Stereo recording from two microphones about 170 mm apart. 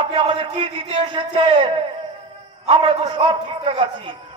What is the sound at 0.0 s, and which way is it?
A man's voice, 30° right (ahead or behind).